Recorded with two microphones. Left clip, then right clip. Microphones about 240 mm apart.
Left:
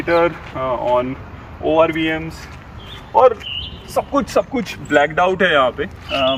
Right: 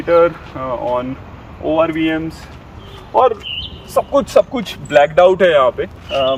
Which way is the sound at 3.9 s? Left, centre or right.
Right.